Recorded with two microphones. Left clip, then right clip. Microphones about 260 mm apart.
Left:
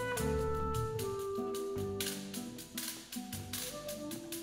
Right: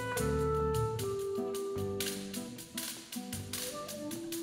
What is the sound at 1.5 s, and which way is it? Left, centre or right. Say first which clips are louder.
Music: right 2 dB; right.